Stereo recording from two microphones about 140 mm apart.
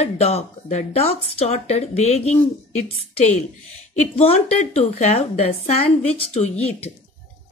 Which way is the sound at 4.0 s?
45° left (ahead or behind).